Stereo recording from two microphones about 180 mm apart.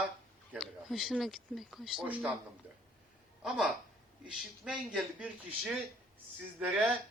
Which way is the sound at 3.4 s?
Centre (ahead or behind).